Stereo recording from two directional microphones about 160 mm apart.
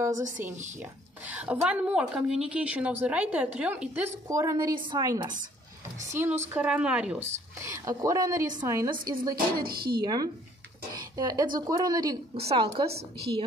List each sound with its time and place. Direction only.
1.2 s a woman's voice: 10° right (ahead or behind)
4.3 s a woman's voice: 20° right (ahead or behind)
7.6 s a woman's voice: 20° right (ahead or behind)
9.3 s speech: 70° right (ahead or behind)
10.0 s a woman's voice: 25° right (ahead or behind)
12.4 s a woman's voice: 35° right (ahead or behind)